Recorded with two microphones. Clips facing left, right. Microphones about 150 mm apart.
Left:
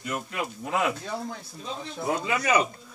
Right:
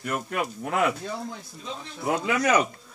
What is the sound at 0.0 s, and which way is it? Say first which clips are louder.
Speech: right 3 dB; 70° right (ahead or behind).